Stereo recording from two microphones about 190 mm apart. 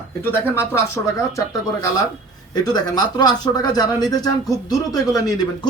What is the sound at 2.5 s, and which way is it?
Speech, 20° left (ahead or behind).